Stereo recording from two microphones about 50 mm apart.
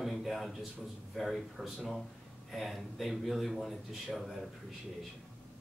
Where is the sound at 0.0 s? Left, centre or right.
Centre.